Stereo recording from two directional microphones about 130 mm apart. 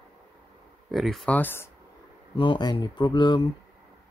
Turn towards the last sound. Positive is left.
turn(degrees=35)  # may be behind; listen again after turning